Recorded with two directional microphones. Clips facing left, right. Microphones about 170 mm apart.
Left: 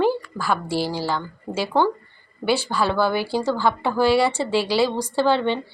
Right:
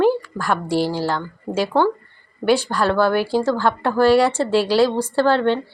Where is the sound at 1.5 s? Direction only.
15° right (ahead or behind).